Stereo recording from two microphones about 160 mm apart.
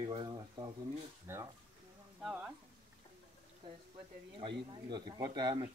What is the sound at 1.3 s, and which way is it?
Speech, 15° right (ahead or behind).